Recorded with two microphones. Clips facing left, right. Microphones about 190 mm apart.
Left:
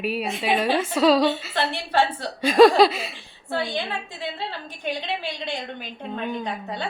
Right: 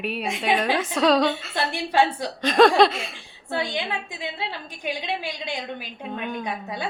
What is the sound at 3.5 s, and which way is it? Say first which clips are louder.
Speech: left 1 dB; 15° right (ahead or behind).